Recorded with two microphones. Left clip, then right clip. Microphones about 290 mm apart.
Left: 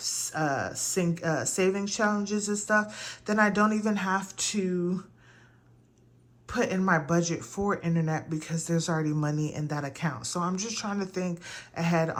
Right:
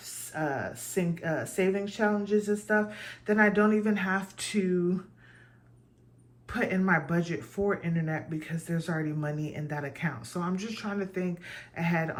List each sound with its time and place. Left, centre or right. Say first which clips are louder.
0.3 s speech: left 2 dB; centre
6.5 s speech: left 1 dB; centre